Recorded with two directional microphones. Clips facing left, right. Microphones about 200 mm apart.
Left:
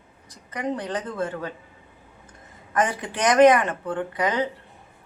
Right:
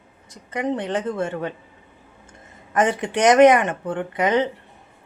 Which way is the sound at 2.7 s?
25° right (ahead or behind).